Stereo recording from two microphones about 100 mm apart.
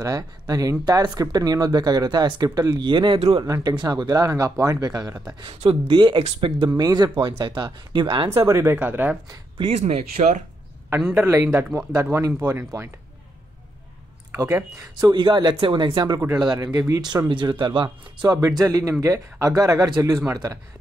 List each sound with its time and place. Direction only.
0.0 s speech: 35° right (ahead or behind); by 3.2 s 50° right (ahead or behind)
3.4 s speech: 35° right (ahead or behind)
5.4 s speech: 70° right (ahead or behind)
6.8 s speech: 40° right (ahead or behind)
8.3 s speech: 25° right (ahead or behind)
8.7 s speech: 15° right (ahead or behind)
9.6 s speech: 85° right
11.1 s speech: 25° right (ahead or behind)
14.3 s speech: 30° right (ahead or behind); by 16.2 s 50° right (ahead or behind)
16.5 s speech: 35° right (ahead or behind)
17.3 s speech: 50° right (ahead or behind)
18.6 s speech: 30° right (ahead or behind)